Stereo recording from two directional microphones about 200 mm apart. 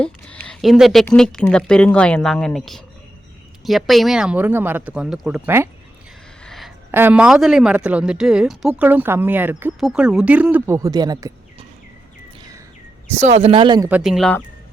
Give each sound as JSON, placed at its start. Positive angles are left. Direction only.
{"t": 0.0, "sound": "speech", "side_deg": 5}
{"t": 6.4, "sound": "a sound", "side_deg": 0}
{"t": 6.9, "sound": "a woman's voice", "side_deg": -10}
{"t": 13.1, "sound": "speech", "side_deg": -35}
{"t": 13.8, "sound": "speech", "side_deg": -5}